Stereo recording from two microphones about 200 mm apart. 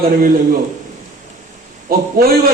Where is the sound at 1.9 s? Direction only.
45° right (ahead or behind).